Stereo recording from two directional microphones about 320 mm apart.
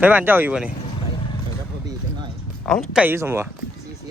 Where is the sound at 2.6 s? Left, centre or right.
Centre.